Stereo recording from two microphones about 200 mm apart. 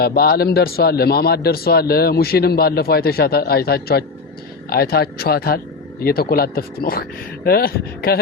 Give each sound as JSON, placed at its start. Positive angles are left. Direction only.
{"t": 0.0, "sound": "a man's voice", "side_deg": 50}